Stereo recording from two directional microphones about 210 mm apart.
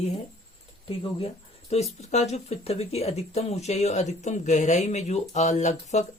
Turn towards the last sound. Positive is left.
turn(degrees=35)  # may be behind; listen again after turning